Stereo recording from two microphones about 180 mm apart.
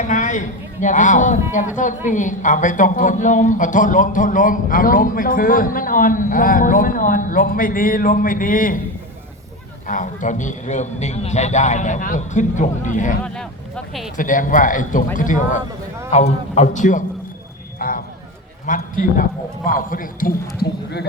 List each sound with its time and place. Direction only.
0.1 s a man's voice: 45° left (ahead or behind)
9.8 s speech: 45° left (ahead or behind)
13.2 s speech: 5° left (ahead or behind)
14.2 s a man's voice: 45° left (ahead or behind)
20.6 s speech: 65° left (ahead or behind)